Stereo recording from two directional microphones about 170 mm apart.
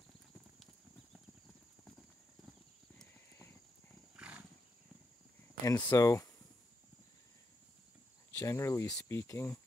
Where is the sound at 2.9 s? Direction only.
10° left (ahead or behind).